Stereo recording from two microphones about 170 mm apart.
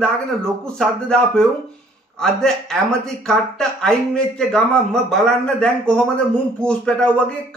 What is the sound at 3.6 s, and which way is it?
A man's voice, 5° left (ahead or behind).